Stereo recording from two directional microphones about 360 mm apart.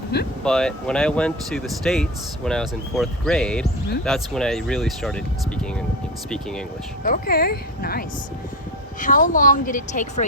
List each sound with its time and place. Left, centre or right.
0.1 s speech: left
0.4 s speech: centre
7.0 s speech: left